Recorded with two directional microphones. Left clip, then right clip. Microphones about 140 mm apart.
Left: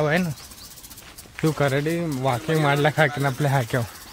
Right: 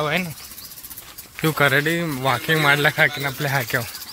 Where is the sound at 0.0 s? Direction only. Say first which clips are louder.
Even; 45° left (ahead or behind).